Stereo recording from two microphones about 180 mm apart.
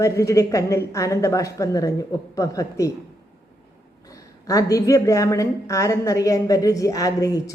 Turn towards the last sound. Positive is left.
turn(degrees=20)  # may be behind; listen again after turning